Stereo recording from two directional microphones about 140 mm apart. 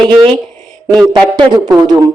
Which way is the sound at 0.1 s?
40° right (ahead or behind).